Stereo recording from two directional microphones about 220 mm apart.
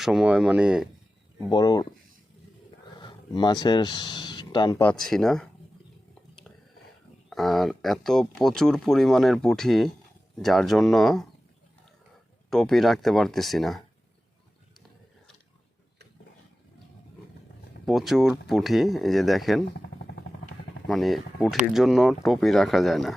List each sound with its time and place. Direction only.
0.0 s speech: 5° right (ahead or behind)
1.5 s speech: 20° left (ahead or behind)
3.0 s speech: 20° left (ahead or behind)
4.8 s speech: 5° left (ahead or behind)
7.3 s speech: centre (ahead or behind)
12.5 s speech: centre (ahead or behind)
17.8 s speech: centre (ahead or behind)
20.8 s speech: centre (ahead or behind)